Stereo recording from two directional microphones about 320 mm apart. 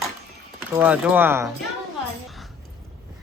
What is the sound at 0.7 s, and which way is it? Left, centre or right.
Speech, centre.